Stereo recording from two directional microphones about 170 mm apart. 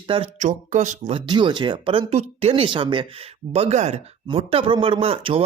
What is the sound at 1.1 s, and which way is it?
Speech, 25° right (ahead or behind).